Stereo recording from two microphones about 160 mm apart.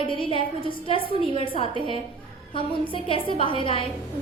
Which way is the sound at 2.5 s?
35° left (ahead or behind).